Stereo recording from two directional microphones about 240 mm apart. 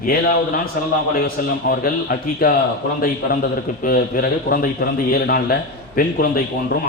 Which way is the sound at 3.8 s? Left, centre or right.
Left.